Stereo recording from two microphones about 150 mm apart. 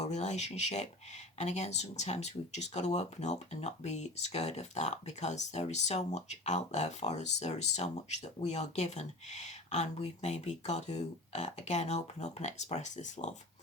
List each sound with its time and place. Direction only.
0.0 s speech: 50° left (ahead or behind)